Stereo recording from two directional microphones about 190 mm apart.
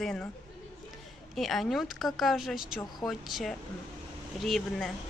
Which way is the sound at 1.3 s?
Centre (ahead or behind).